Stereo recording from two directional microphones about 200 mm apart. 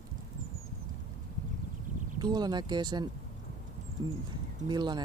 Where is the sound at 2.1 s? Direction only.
20° right (ahead or behind).